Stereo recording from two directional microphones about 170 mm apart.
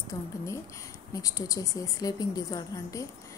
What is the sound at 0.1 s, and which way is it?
A woman's voice, 20° left (ahead or behind).